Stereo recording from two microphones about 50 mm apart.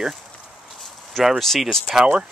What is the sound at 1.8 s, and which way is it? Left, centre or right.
Speech, centre.